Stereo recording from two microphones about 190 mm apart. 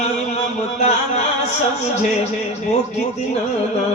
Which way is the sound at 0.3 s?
35° left (ahead or behind).